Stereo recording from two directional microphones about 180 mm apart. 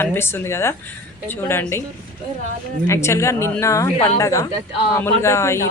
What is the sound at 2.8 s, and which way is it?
Speech, 15° left (ahead or behind).